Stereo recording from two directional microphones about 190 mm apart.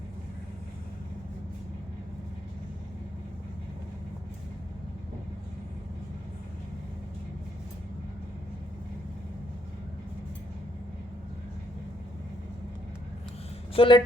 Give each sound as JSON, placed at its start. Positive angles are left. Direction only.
{"t": 13.7, "sound": "speech", "side_deg": 25}